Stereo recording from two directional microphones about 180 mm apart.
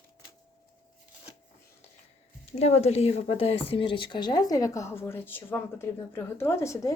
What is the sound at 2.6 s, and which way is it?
Speech, 35° left (ahead or behind).